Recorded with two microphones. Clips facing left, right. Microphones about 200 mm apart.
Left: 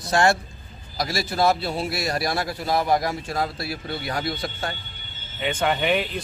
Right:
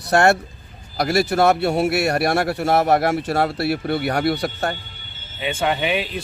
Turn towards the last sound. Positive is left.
turn(degrees=-5)  # may be behind; listen again after turning